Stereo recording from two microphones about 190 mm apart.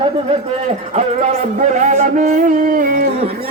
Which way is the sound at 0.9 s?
40° right (ahead or behind).